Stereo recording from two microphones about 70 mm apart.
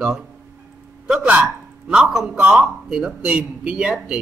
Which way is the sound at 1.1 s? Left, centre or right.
Centre.